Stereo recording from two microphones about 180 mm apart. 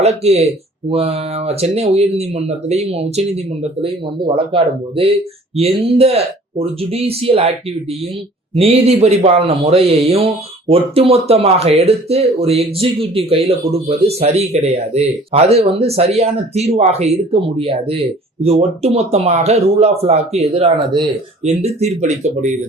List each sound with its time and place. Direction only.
0.0 s a man's voice: 35° right (ahead or behind)
8.5 s a man's voice: 35° right (ahead or behind)
21.4 s a man's voice: 35° right (ahead or behind)